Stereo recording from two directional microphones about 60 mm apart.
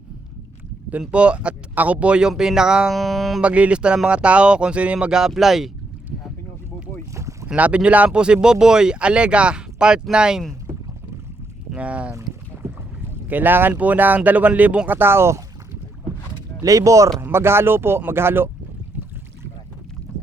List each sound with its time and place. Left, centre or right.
1.1 s speech: centre
2.3 s speech: centre
2.9 s speech: centre
3.4 s speech: right; by 5.7 s centre
7.1 s boat: right
7.4 s speech: right
11.7 s boat: right
12.6 s boat: right
13.2 s speech: right
14.8 s speech: right
16.6 s speech: right
17.2 s speech: right